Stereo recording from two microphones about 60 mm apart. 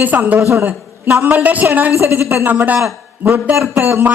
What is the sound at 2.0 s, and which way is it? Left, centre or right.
Speech, right.